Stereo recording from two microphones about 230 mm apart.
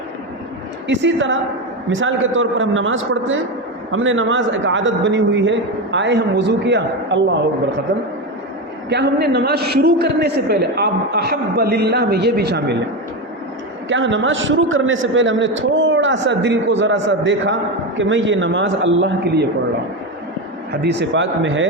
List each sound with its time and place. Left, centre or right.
0.9 s a man's voice: right
8.9 s a man's voice: right
13.9 s a man's voice: right
20.8 s a man's voice: right